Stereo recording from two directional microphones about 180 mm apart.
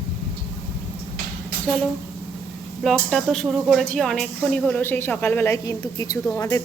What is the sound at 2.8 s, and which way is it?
A woman's voice, centre (ahead or behind).